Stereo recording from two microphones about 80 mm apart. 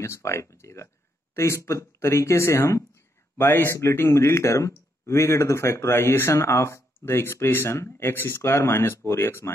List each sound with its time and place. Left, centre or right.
0.0 s speech: left